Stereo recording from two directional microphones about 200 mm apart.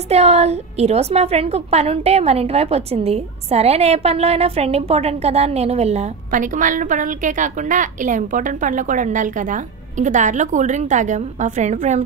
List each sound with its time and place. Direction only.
0.1 s a woman's voice: 30° right (ahead or behind)